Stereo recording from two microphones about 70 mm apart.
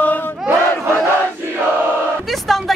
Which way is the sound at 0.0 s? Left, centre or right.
Left.